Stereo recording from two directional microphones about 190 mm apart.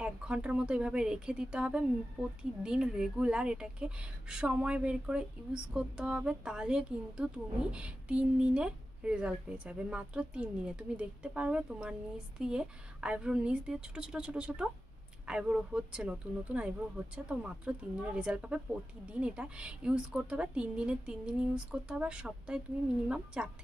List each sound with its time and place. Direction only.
0.0 s speech: 5° right (ahead or behind)